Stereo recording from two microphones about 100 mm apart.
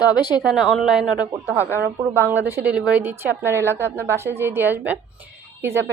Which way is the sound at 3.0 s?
20° right (ahead or behind).